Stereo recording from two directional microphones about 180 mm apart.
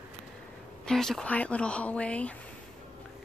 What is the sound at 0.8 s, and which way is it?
Speech, centre (ahead or behind).